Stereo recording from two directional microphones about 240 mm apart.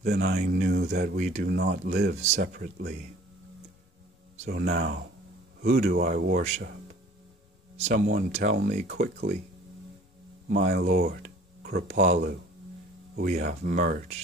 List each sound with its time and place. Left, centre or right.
0.0 s speech: right
2.2 s speech: right
2.5 s speech: right
4.4 s speech: right
7.7 s speech: right
10.5 s speech: right